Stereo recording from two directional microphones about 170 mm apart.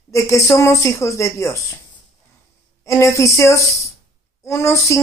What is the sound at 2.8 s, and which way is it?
A woman's voice, 15° left (ahead or behind).